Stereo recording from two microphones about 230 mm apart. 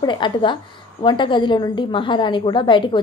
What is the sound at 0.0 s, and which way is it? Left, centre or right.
A woman's voice, centre.